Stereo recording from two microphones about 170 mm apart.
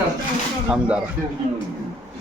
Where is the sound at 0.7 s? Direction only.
5° right (ahead or behind).